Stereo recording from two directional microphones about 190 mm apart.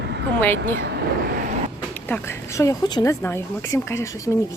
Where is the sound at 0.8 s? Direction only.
60° right (ahead or behind).